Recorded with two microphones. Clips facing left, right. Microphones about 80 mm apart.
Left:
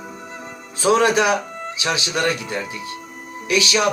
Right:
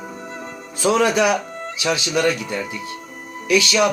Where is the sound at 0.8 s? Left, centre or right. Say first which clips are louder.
Left 1 dB; centre.